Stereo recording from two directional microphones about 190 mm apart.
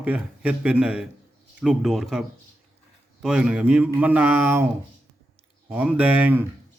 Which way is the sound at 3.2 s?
5° right (ahead or behind).